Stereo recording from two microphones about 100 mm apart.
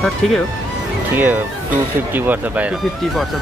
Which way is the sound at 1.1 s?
20° right (ahead or behind).